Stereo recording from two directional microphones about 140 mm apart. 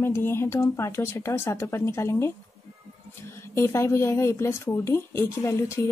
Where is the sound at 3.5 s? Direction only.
20° left (ahead or behind).